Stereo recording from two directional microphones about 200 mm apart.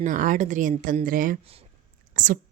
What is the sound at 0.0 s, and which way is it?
A woman's voice, 40° right (ahead or behind).